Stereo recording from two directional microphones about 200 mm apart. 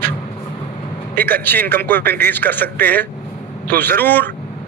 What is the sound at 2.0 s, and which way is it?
Speech, 50° right (ahead or behind).